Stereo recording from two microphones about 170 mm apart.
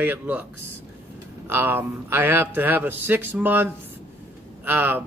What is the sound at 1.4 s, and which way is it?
Speech, 10° right (ahead or behind).